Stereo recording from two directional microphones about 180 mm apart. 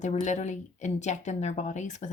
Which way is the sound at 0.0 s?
40° left (ahead or behind).